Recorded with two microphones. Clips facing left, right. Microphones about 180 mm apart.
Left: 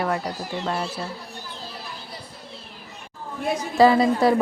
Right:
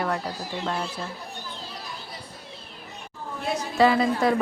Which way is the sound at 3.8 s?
35° left (ahead or behind).